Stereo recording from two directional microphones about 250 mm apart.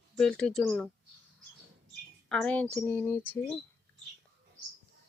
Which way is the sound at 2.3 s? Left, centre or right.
Centre.